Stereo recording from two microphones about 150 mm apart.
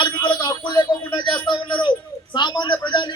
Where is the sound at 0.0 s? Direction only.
30° left (ahead or behind).